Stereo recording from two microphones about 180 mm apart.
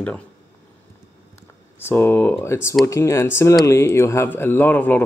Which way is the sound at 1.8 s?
10° left (ahead or behind).